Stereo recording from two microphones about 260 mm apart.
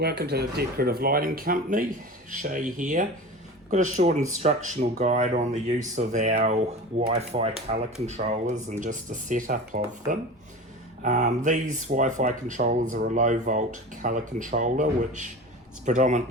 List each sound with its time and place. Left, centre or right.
0.0 s speech: right